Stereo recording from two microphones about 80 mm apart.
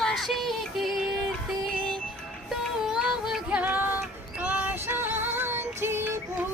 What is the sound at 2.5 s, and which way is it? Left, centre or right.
Music, centre.